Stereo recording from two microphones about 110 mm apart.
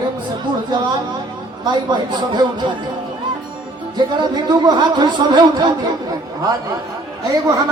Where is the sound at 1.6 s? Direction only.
40° right (ahead or behind).